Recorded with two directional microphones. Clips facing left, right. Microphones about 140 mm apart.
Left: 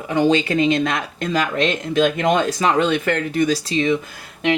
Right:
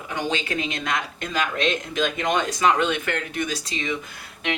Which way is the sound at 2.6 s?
35° left (ahead or behind).